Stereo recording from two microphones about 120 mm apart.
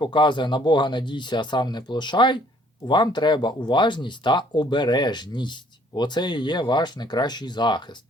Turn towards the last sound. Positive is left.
turn(degrees=40)  # may be behind; listen again after turning